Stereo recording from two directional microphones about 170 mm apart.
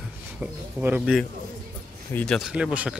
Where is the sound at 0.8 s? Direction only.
10° right (ahead or behind).